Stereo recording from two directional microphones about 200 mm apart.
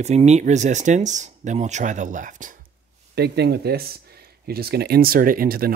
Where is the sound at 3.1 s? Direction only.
55° right (ahead or behind).